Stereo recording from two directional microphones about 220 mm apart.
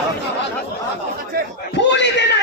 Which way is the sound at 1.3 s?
45° right (ahead or behind).